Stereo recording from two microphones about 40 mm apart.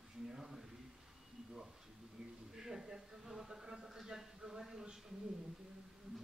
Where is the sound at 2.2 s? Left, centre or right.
Centre.